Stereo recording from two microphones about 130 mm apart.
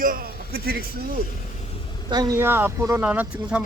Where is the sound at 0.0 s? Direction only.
90° right.